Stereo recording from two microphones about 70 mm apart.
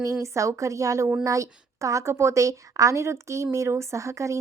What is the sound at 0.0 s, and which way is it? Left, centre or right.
A woman's voice, right.